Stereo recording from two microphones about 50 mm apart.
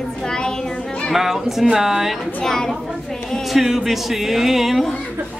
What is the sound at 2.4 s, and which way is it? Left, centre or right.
Speech, centre.